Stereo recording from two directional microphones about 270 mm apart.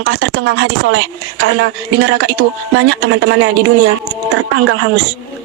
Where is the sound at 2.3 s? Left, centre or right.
Right.